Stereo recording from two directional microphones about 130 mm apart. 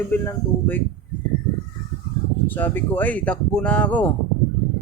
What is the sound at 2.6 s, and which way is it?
Speech, 15° left (ahead or behind).